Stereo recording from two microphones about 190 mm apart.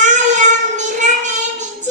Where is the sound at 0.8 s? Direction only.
40° right (ahead or behind).